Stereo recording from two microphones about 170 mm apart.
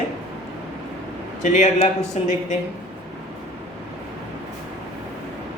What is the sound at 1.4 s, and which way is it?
A man's voice, 45° left (ahead or behind).